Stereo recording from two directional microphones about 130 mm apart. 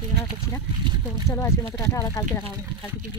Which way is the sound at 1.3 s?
20° left (ahead or behind).